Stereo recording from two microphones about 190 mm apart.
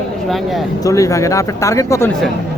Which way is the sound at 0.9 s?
15° left (ahead or behind).